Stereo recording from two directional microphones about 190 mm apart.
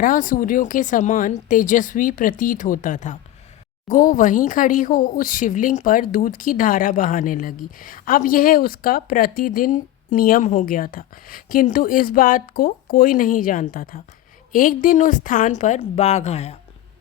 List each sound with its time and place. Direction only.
0.0 s a woman's voice: 45° left (ahead or behind)